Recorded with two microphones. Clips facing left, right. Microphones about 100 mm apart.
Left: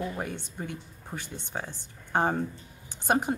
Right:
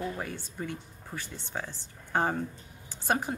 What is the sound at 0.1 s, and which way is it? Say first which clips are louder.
Speech: left 2 dB; 20° left (ahead or behind).